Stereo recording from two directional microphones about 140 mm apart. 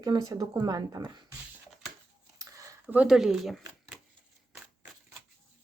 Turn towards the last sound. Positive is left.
turn(degrees=-5)  # may be behind; listen again after turning